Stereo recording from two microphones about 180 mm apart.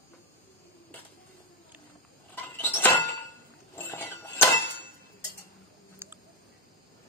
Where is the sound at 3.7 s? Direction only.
10° left (ahead or behind).